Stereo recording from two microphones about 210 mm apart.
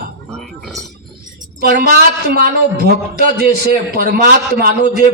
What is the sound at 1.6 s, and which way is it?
A man's voice, 50° right (ahead or behind).